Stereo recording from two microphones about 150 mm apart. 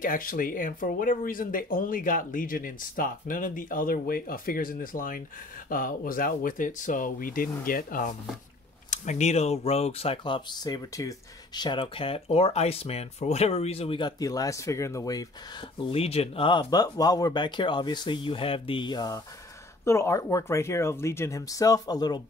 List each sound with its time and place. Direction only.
0.0 s speech: 65° left (ahead or behind)
8.9 s speech: 55° left (ahead or behind); by 15.2 s 20° left (ahead or behind)
15.8 s speech: 40° left (ahead or behind); by 22.2 s 25° left (ahead or behind)